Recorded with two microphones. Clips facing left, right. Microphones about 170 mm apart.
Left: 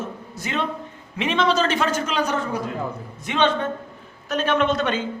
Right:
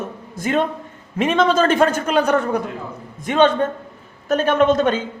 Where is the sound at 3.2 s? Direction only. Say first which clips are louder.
Right 6 dB; 50° right (ahead or behind).